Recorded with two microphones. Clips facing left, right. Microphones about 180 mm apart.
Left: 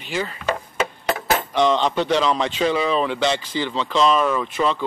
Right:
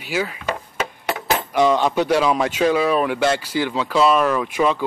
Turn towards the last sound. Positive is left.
turn(degrees=-10)  # may be behind; listen again after turning